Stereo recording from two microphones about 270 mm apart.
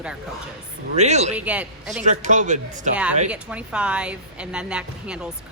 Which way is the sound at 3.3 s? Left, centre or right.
Centre.